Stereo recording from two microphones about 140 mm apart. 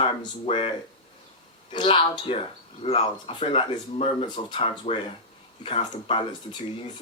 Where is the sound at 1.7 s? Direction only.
40° left (ahead or behind).